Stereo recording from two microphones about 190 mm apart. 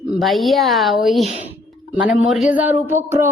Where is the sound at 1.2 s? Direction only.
35° left (ahead or behind).